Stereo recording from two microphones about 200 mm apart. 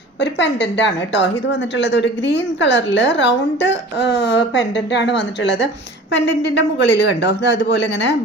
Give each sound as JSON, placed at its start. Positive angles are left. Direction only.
{"t": 0.2, "sound": "a woman's voice", "side_deg": 60}